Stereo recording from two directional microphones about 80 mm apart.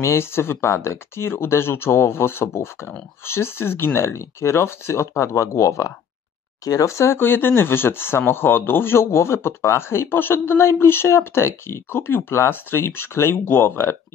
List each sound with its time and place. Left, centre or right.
0.0 s a man's voice: left